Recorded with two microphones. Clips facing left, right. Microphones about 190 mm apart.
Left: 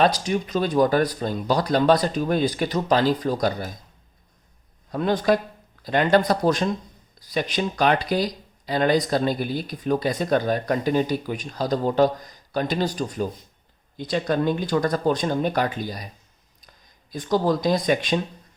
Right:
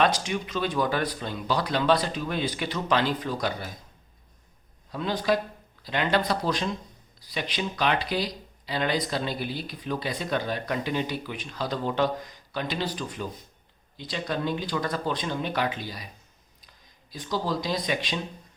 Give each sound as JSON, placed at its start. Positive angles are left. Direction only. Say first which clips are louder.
{"t": 0.0, "sound": "speech", "louder": "left 4 dB", "side_deg": 35}
{"t": 4.9, "sound": "speech", "louder": "left 5 dB", "side_deg": 50}
{"t": 17.1, "sound": "speech", "louder": "left 8 dB", "side_deg": 50}